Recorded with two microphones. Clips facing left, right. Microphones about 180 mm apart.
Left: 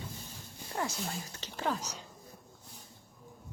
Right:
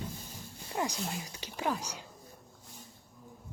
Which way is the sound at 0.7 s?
15° right (ahead or behind).